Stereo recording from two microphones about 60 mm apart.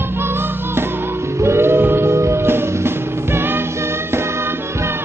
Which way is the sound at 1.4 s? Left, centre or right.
Right.